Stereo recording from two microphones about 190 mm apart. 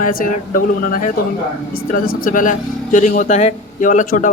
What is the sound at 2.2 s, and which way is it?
Speech, 45° left (ahead or behind).